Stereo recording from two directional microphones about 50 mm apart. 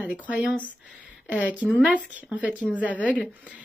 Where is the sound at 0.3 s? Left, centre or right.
Right.